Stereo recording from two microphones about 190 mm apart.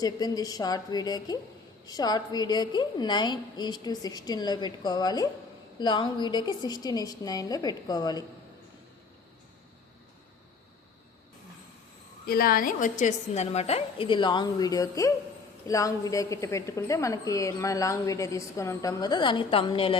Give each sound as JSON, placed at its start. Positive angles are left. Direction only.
{"t": 0.0, "sound": "a woman's voice", "side_deg": 20}
{"t": 12.2, "sound": "a woman's voice", "side_deg": 50}